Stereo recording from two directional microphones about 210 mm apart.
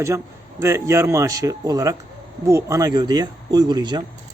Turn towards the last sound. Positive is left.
turn(degrees=-20)  # may be behind; listen again after turning